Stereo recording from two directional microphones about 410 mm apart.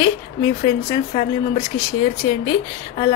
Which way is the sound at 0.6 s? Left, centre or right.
Centre.